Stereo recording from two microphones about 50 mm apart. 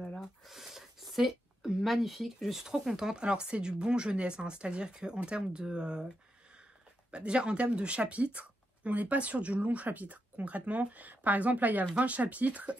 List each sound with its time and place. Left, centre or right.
0.2 s speech: centre
7.1 s speech: right